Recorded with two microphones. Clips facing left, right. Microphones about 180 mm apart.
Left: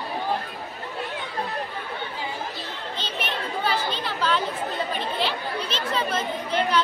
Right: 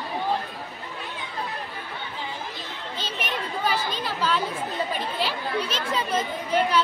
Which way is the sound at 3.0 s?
10° right (ahead or behind).